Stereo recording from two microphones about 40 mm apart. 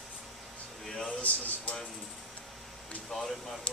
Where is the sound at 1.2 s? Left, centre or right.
Left.